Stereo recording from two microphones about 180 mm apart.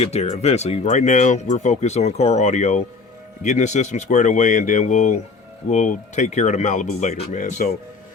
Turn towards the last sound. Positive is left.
turn(degrees=45)  # may be behind; listen again after turning